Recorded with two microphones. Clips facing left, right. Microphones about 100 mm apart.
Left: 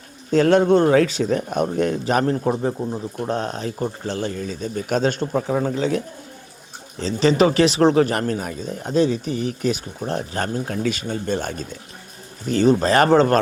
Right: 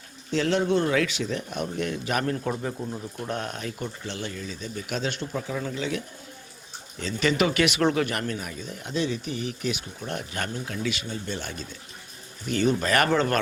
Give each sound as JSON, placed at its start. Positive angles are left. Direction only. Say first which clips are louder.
{"t": 0.3, "sound": "speech", "louder": "left 9 dB", "side_deg": 50}
{"t": 7.0, "sound": "speech", "louder": "left 7 dB", "side_deg": 30}